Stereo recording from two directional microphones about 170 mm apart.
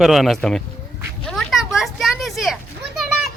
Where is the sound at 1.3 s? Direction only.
Centre (ahead or behind).